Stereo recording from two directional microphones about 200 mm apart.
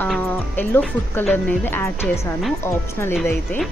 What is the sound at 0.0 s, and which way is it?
Speech, 5° left (ahead or behind).